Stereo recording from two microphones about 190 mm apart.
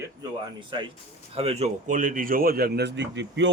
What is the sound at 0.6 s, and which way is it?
A man's voice, 25° right (ahead or behind).